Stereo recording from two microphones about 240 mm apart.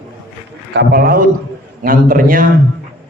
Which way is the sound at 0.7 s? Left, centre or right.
Right.